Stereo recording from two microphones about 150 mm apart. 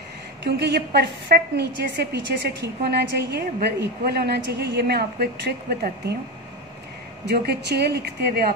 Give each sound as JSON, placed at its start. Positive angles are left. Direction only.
{"t": 0.6, "sound": "a woman's voice", "side_deg": -90}
{"t": 7.2, "sound": "a woman's voice", "side_deg": -90}